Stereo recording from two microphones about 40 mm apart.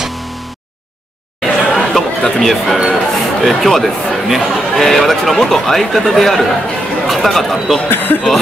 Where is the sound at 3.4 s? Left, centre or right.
Centre.